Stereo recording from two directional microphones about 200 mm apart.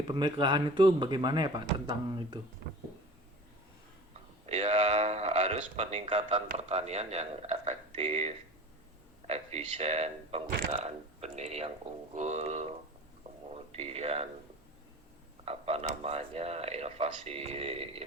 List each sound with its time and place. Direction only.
0.1 s speech: 25° right (ahead or behind)
4.1 s speech: 30° right (ahead or behind)
13.7 s speech: 30° right (ahead or behind)
15.4 s speech: 30° right (ahead or behind)